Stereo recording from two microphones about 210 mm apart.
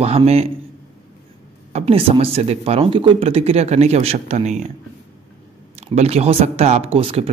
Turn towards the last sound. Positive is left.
turn(degrees=-25)  # may be behind; listen again after turning